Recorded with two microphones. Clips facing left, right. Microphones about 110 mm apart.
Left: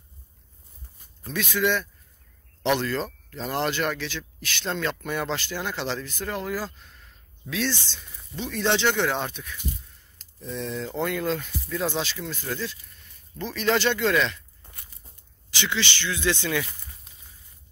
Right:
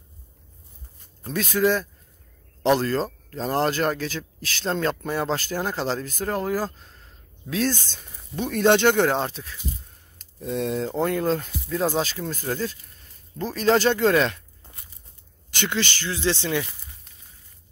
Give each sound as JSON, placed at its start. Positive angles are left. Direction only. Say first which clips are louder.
{"t": 1.2, "sound": "speech", "louder": "right 4 dB", "side_deg": -40}
{"t": 10.5, "sound": "speech", "louder": "right 6 dB", "side_deg": -50}
{"t": 15.5, "sound": "speech", "louder": "right 2 dB", "side_deg": -50}